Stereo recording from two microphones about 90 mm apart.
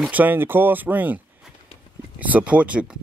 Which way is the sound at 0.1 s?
20° right (ahead or behind).